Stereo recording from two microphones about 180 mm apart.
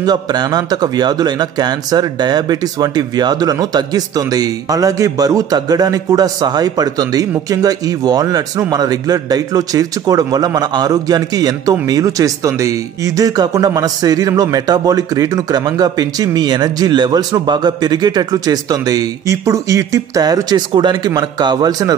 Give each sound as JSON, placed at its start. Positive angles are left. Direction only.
{"t": 0.0, "sound": "a man's voice", "side_deg": -25}